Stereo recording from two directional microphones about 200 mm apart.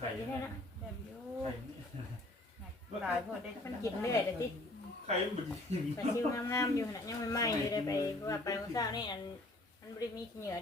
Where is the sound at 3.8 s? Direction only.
15° left (ahead or behind).